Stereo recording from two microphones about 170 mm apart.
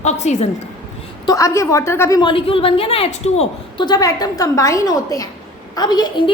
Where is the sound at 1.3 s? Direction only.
20° left (ahead or behind); by 3.8 s 40° left (ahead or behind).